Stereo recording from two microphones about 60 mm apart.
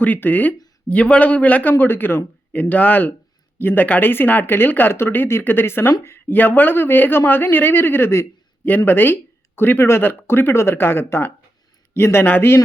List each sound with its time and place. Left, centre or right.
0.0 s a man's voice: left
1.8 s speech: left
8.6 s speech: left